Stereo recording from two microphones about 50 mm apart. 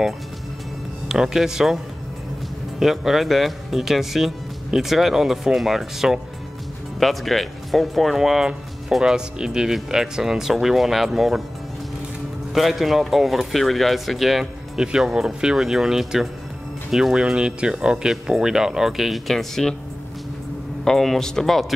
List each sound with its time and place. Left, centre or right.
1.0 s speech: centre
2.8 s speech: centre
7.0 s speech: centre
12.5 s speech: centre
14.8 s speech: centre
20.8 s speech: centre